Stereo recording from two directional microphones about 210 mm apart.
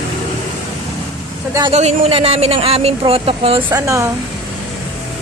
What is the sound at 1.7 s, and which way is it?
Speech, 30° right (ahead or behind).